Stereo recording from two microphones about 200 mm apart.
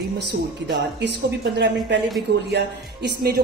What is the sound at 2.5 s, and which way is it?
Speech, 55° right (ahead or behind).